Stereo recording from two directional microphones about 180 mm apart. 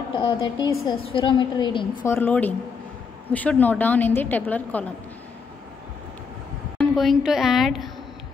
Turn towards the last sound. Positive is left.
turn(degrees=0)  # may be behind; listen again after turning